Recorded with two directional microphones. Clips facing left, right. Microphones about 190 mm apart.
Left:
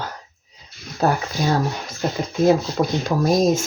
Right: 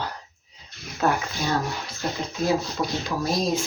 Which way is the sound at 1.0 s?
40° left (ahead or behind).